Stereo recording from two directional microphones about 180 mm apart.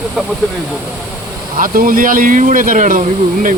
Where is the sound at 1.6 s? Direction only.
50° right (ahead or behind).